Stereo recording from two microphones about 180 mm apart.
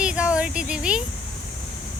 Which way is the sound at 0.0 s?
5° right (ahead or behind).